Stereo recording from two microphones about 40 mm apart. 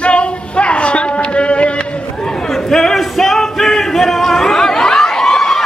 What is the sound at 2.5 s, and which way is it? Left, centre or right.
Music, centre.